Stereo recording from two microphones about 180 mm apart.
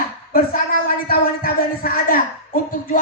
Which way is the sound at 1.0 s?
55° left (ahead or behind).